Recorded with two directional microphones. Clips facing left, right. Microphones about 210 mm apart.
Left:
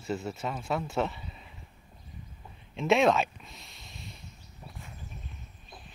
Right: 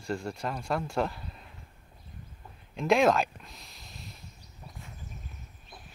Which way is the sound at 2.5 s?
Centre (ahead or behind).